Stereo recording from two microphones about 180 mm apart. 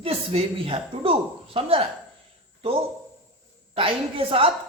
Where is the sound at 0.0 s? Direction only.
30° right (ahead or behind).